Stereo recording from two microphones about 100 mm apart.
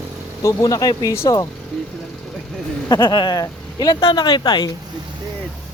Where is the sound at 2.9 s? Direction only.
45° left (ahead or behind).